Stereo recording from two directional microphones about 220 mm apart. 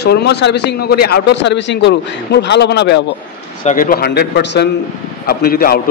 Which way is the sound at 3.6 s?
40° left (ahead or behind).